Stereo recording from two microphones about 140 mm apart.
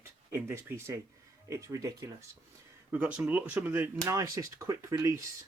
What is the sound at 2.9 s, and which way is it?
Speech, 10° right (ahead or behind).